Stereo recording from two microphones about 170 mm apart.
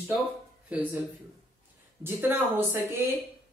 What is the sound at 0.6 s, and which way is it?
Speech, 10° right (ahead or behind).